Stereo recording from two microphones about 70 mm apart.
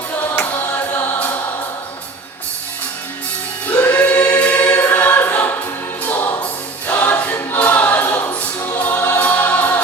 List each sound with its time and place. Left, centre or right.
0.3 s music: left
3.7 s choir: left